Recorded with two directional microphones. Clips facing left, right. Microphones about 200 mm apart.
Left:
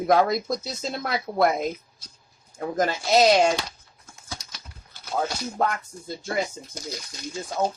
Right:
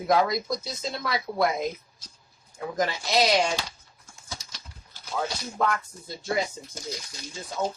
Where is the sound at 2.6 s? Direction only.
50° left (ahead or behind).